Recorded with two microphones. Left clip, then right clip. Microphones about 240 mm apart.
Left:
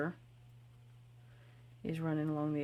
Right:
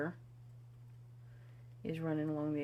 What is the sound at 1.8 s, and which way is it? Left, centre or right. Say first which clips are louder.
Speech: even; left.